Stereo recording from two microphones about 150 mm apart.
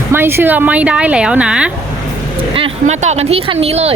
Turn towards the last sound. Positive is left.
turn(degrees=-45)  # may be behind; listen again after turning